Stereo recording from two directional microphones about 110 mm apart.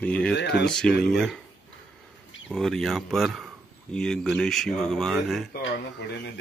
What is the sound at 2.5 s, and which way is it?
Speech, 5° left (ahead or behind).